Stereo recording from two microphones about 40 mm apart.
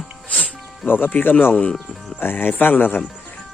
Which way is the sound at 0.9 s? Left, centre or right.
Left.